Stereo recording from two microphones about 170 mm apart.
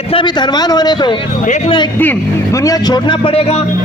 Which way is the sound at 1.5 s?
45° left (ahead or behind).